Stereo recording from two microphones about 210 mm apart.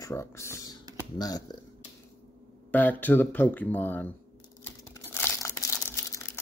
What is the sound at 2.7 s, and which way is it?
Speech, 10° left (ahead or behind).